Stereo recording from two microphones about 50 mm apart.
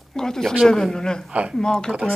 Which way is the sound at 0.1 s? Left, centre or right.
Centre.